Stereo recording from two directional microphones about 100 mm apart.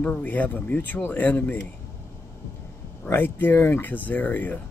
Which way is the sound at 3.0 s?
20° left (ahead or behind).